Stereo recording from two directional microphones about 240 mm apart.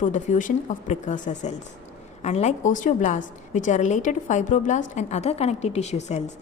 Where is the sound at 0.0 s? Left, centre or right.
Left.